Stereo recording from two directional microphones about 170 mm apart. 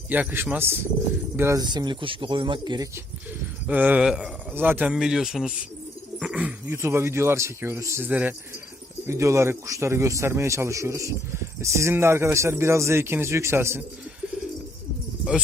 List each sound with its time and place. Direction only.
0.1 s speech: 10° right (ahead or behind)
3.7 s speech: 10° right (ahead or behind)